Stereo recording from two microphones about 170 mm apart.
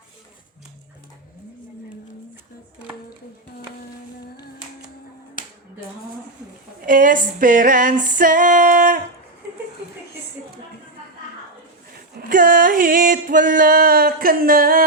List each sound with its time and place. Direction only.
6.8 s music: 50° right (ahead or behind)
12.1 s music: 55° right (ahead or behind)